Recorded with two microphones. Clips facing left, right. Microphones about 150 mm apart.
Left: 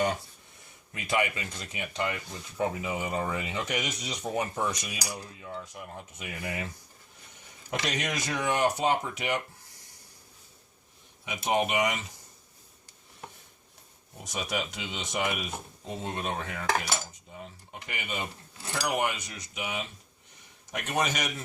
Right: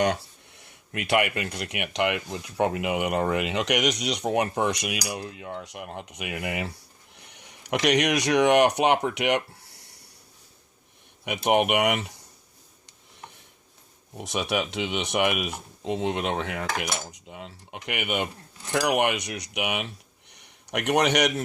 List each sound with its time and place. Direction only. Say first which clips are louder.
0.0 s speech: right 4 dB; 80° right
11.3 s speech: right 6 dB; 65° right (ahead or behind)
14.2 s a man's voice: right 6 dB; 70° right (ahead or behind)